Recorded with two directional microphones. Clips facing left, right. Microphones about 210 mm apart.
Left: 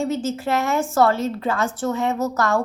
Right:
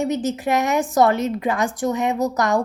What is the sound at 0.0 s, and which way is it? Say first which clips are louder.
A woman's voice: right 1 dB; 15° right (ahead or behind).